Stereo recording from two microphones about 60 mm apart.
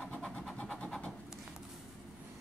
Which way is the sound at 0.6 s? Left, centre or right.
Centre.